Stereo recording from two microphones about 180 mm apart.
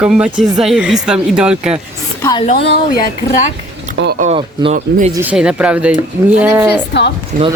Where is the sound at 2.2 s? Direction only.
20° left (ahead or behind).